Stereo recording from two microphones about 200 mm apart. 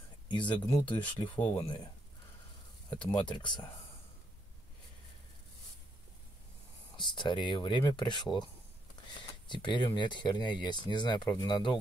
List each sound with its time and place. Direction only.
0.3 s speech: 25° left (ahead or behind)
0.7 s speech: 10° left (ahead or behind)
1.0 s speech: 25° left (ahead or behind)
1.4 s speech: 10° left (ahead or behind)
3.2 s speech: 20° left (ahead or behind)
7.0 s speech: 20° left (ahead or behind)
9.5 s speech: 25° left (ahead or behind)